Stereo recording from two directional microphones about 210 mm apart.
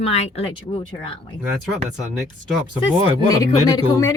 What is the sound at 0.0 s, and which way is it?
Speech, 30° left (ahead or behind).